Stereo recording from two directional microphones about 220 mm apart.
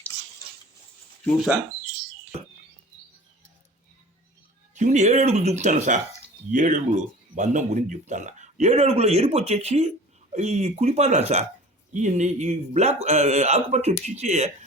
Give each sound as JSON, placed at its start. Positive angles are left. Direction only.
{"t": 1.2, "sound": "speech", "side_deg": 0}
{"t": 4.7, "sound": "speech", "side_deg": -30}